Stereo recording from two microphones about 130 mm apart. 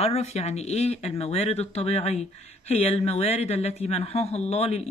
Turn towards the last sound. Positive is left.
turn(degrees=55)  # may be behind; listen again after turning